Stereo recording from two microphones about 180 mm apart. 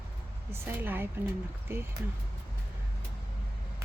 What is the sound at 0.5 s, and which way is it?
Speech, 10° right (ahead or behind).